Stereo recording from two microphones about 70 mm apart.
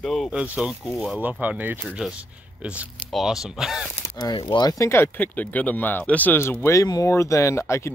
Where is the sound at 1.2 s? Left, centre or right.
Right.